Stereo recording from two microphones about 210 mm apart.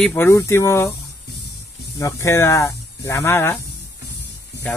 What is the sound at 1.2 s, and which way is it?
Music, 50° left (ahead or behind).